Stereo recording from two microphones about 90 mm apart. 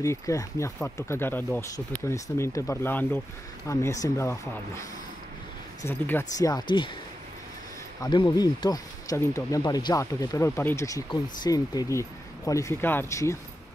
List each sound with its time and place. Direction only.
0.0 s speech: 35° left (ahead or behind)
1.6 s speech: 35° left (ahead or behind)
3.6 s speech: 35° left (ahead or behind)
5.9 s speech: 25° left (ahead or behind)
6.3 s speech: 40° left (ahead or behind)
8.0 s speech: 50° left (ahead or behind)
9.6 s speech: 50° left (ahead or behind); by 10.9 s 25° left (ahead or behind)
11.1 s speech: 50° left (ahead or behind)
11.9 s speech: 35° left (ahead or behind)